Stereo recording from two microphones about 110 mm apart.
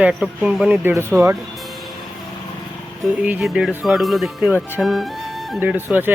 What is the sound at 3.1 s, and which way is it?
Speech, 5° right (ahead or behind).